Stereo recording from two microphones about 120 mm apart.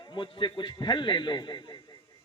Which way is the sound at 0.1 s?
40° left (ahead or behind).